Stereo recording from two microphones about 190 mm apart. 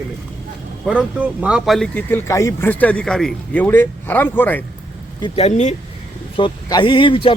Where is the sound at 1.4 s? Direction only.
5° right (ahead or behind).